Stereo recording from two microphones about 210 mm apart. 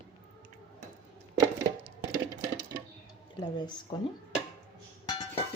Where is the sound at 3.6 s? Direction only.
20° left (ahead or behind).